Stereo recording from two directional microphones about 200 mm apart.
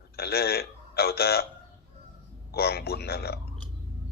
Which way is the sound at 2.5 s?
50° left (ahead or behind).